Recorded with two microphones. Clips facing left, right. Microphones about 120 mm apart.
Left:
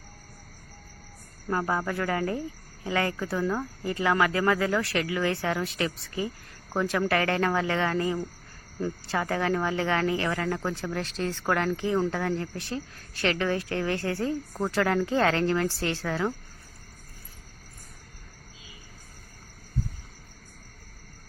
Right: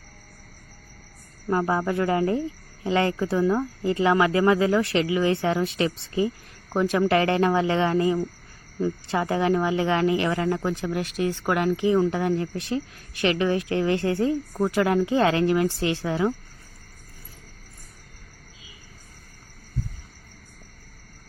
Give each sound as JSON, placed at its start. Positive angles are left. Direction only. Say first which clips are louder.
{"t": 1.5, "sound": "speech", "louder": "right 4 dB", "side_deg": -20}